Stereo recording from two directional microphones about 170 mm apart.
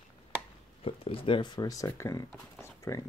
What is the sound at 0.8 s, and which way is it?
Speech, 35° left (ahead or behind).